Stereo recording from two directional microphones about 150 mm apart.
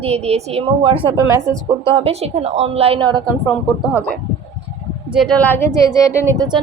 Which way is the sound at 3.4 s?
Centre (ahead or behind).